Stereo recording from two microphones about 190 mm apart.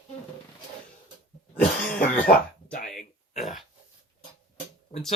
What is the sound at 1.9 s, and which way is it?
Cough, 50° left (ahead or behind).